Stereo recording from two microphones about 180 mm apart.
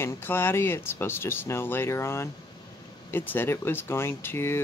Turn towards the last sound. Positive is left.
turn(degrees=15)  # may be behind; listen again after turning